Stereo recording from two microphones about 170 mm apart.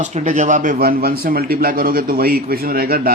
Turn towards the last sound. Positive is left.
turn(degrees=-60)  # may be behind; listen again after turning